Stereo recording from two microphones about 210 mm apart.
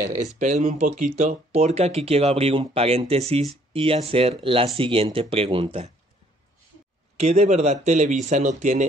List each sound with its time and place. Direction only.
0.0 s speech: 40° right (ahead or behind)
7.2 s speech: 30° right (ahead or behind)